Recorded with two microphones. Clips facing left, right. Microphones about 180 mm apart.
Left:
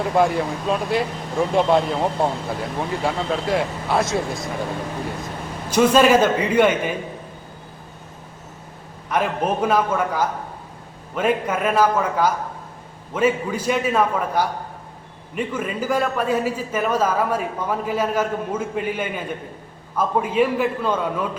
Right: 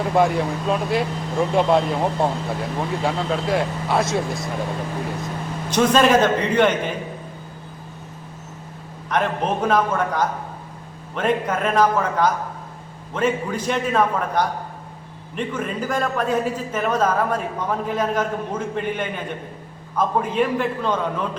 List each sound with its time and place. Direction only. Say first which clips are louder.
0.0 s speech: even; centre (ahead or behind)
5.7 s a man's voice: left 1 dB; 10° left (ahead or behind)
9.0 s a man's voice: even; 5° left (ahead or behind)